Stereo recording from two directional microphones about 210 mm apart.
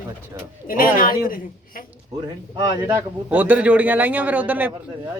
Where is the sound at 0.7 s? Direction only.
40° left (ahead or behind).